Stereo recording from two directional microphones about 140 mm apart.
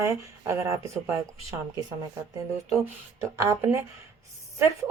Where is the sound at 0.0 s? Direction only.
20° right (ahead or behind).